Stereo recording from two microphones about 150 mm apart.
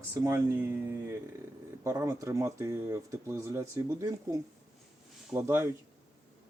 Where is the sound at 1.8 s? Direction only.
20° right (ahead or behind).